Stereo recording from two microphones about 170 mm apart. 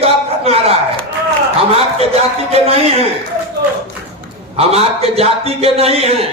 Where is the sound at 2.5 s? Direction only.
35° right (ahead or behind).